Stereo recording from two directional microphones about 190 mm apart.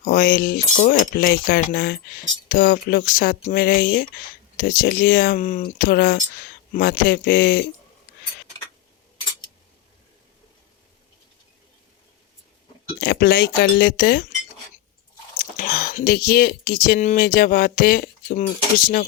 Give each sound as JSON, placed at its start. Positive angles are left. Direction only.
{"t": 0.0, "sound": "speech", "side_deg": 50}
{"t": 13.0, "sound": "speech", "side_deg": 60}
{"t": 15.4, "sound": "speech", "side_deg": 50}